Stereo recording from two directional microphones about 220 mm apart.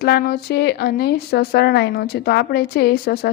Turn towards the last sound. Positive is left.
turn(degrees=45)  # may be behind; listen again after turning